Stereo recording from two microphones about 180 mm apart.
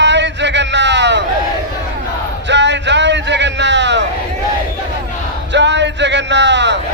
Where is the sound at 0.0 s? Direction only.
80° right.